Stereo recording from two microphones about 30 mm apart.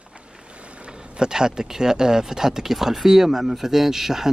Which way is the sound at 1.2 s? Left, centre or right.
Right.